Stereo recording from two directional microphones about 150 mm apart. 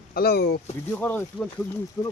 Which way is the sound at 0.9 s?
10° left (ahead or behind).